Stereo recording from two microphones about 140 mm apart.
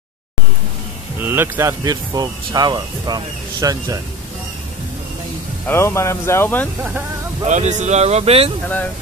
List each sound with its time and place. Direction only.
1.2 s speech: 15° right (ahead or behind)
5.7 s speech: 20° left (ahead or behind)
7.4 s speech: 60° right (ahead or behind)